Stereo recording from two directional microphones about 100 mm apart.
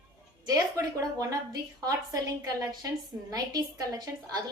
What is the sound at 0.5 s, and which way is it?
A woman's voice, 35° right (ahead or behind).